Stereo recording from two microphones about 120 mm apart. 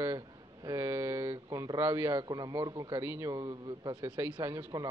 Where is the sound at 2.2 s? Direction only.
35° right (ahead or behind).